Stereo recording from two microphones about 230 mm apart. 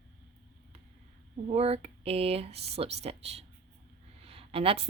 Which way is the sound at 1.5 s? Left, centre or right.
Right.